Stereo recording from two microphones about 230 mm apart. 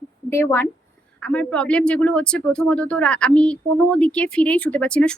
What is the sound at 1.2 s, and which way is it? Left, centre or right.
Speech, centre.